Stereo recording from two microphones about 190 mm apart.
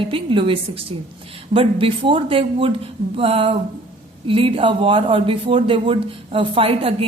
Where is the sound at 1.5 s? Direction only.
30° right (ahead or behind).